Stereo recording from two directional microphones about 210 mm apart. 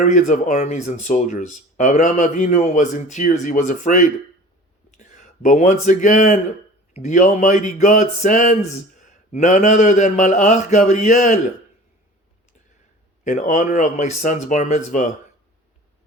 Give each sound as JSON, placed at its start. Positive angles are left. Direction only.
{"t": 0.0, "sound": "speech", "side_deg": 35}
{"t": 13.2, "sound": "speech", "side_deg": 35}